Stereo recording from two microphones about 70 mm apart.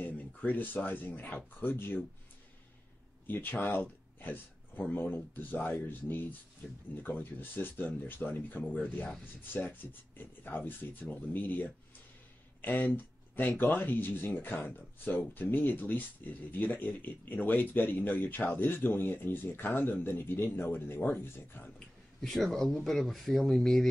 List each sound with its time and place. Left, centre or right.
0.0 s speech: left
3.3 s speech: left
21.7 s speech: centre